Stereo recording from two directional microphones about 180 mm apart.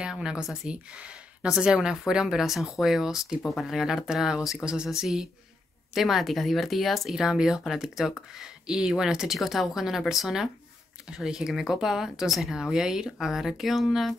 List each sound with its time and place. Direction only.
0.0 s speech: 5° right (ahead or behind)